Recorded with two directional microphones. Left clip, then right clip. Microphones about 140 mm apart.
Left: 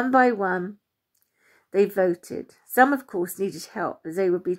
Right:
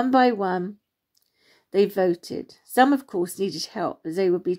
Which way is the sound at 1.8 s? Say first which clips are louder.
Even; 25° right (ahead or behind).